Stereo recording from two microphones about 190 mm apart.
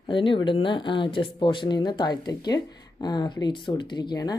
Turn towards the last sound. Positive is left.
turn(degrees=20)  # may be behind; listen again after turning